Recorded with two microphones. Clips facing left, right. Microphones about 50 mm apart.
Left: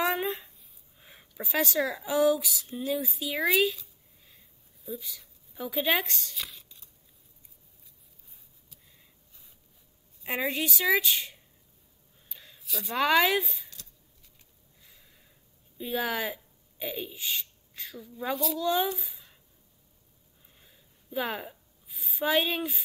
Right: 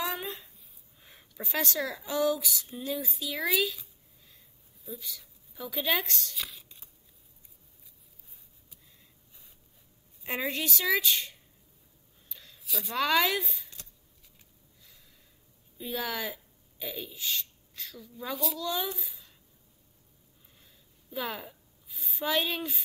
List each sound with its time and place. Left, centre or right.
0.0 s a sound: left
0.9 s speech: centre
4.9 s speech: centre
10.2 s a woman's voice: centre
12.3 s a sound: centre
12.6 s a woman's voice: centre
12.9 s speech: centre
13.4 s a woman's voice: centre
15.8 s speech: centre
18.3 s a woman's voice: centre
18.6 s speech: left
20.6 s a sound: centre
21.8 s a sound: centre
22.2 s speech: centre